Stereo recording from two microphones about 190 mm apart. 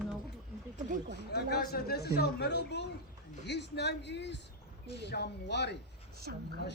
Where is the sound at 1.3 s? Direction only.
60° left (ahead or behind).